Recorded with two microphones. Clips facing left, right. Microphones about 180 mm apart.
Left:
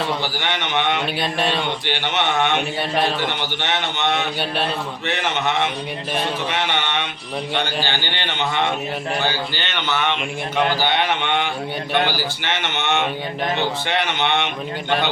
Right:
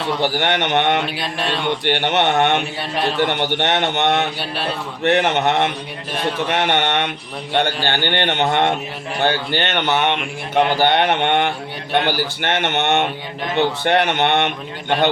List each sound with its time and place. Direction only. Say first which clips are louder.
0.2 s speech: right 6 dB; 60° right (ahead or behind)
1.2 s mantra: left 2 dB; centre (ahead or behind)
1.8 s speech: right 5 dB; 60° right (ahead or behind)